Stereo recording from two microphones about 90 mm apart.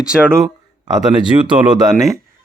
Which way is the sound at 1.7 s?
40° right (ahead or behind).